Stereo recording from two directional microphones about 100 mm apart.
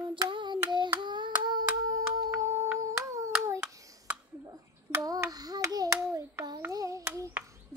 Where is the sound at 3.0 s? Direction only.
30° right (ahead or behind).